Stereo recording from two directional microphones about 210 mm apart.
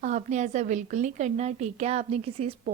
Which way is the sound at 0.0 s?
35° right (ahead or behind).